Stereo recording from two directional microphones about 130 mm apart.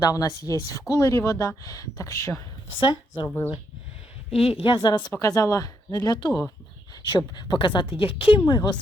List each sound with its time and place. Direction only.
0.0 s speech: 30° left (ahead or behind)
2.8 s a woman's voice: 40° left (ahead or behind)
3.2 s speech: 15° left (ahead or behind)
4.6 s a woman's voice: 35° left (ahead or behind)